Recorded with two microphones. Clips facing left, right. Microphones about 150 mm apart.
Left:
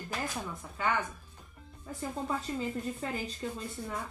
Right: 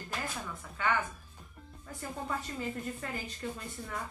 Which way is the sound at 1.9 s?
20° left (ahead or behind).